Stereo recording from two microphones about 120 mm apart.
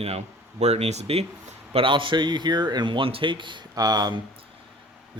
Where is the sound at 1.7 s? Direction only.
45° right (ahead or behind).